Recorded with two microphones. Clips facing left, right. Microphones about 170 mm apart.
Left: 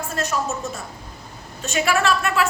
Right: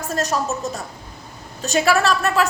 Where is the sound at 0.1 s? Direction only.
40° right (ahead or behind).